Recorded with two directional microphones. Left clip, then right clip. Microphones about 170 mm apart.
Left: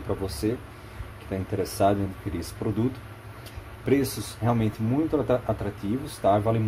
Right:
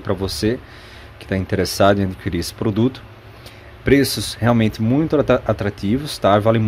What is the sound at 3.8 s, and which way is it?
Speech, 45° right (ahead or behind).